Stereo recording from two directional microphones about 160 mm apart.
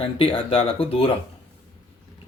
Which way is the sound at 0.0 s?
35° left (ahead or behind).